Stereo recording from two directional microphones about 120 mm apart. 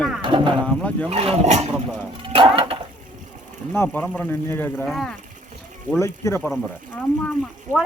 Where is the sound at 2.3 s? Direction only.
50° right (ahead or behind).